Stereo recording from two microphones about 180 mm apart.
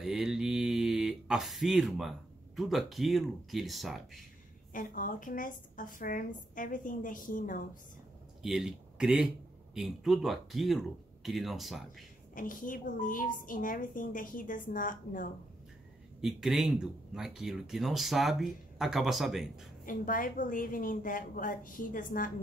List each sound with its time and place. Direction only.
0.0 s speech: centre (ahead or behind)
4.7 s a woman's voice: 50° left (ahead or behind)
8.4 s speech: 5° right (ahead or behind)
12.4 s a woman's voice: 50° left (ahead or behind)
16.2 s speech: centre (ahead or behind)
19.8 s a woman's voice: 50° left (ahead or behind)